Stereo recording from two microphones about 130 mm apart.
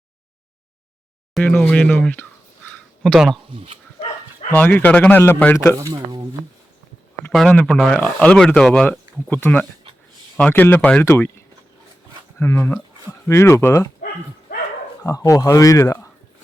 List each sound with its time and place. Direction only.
1.4 s speech: 10° left (ahead or behind)
4.5 s speech: 15° left (ahead or behind)
5.7 s speech: 25° right (ahead or behind)
7.3 s speech: 10° left (ahead or behind)
11.0 s speech: 20° left (ahead or behind)
15.0 s speech: 25° left (ahead or behind)